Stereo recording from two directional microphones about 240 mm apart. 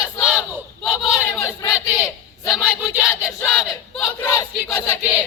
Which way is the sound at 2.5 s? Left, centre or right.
Centre.